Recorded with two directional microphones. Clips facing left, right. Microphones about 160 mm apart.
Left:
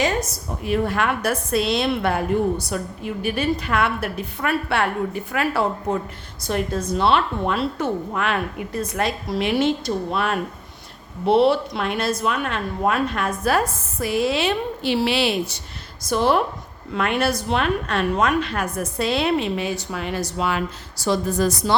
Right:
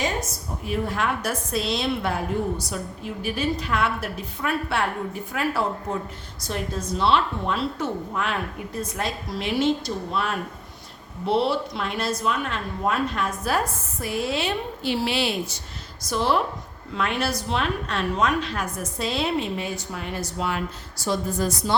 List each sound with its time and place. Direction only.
0.0 s a woman's voice: 75° left (ahead or behind)
6.5 s a woman's voice: 60° left (ahead or behind)
14.0 s a woman's voice: 90° left; by 15.6 s 75° left (ahead or behind)
16.0 s a woman's voice: 55° left (ahead or behind); by 21.8 s 80° left